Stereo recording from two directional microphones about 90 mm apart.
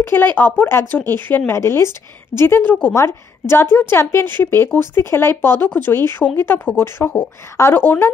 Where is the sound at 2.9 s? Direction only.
30° left (ahead or behind).